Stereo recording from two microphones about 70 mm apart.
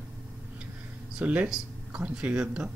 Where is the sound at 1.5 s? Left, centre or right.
Centre.